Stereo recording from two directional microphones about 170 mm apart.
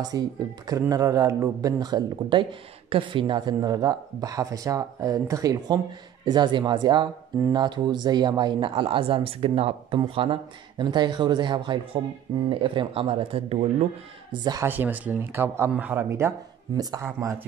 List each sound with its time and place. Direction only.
0.1 s speech: 20° right (ahead or behind); by 13.8 s 35° right (ahead or behind)
14.3 s speech: 25° right (ahead or behind)
14.7 s speech: 10° right (ahead or behind)